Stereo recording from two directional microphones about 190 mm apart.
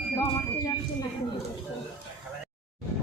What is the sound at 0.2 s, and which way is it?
Sine wave, 20° left (ahead or behind).